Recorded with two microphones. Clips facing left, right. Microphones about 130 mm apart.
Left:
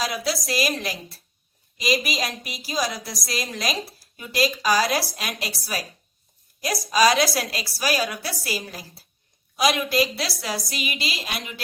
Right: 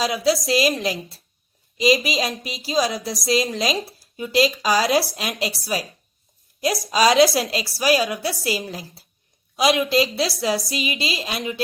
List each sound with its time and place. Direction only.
0.0 s a woman's voice: 25° right (ahead or behind)